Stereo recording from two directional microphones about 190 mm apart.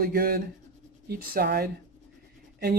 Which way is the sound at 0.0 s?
50° right (ahead or behind).